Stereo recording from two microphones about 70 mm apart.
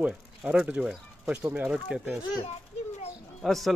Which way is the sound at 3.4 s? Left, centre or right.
Centre.